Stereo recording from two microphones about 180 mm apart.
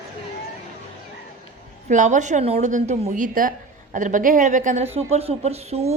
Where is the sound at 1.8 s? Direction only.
45° right (ahead or behind).